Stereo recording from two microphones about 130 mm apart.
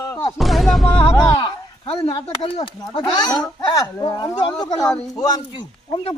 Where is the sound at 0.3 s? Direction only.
Centre (ahead or behind).